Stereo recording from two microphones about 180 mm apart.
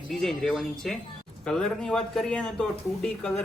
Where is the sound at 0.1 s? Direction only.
Centre (ahead or behind).